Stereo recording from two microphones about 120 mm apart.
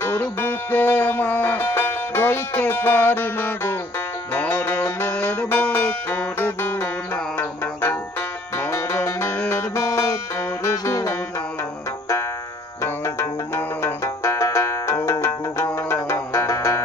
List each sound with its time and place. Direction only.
0.0 s music: 20° left (ahead or behind)
12.8 s music: 20° left (ahead or behind)